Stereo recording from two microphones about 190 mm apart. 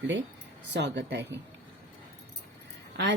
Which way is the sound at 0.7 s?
65° right (ahead or behind).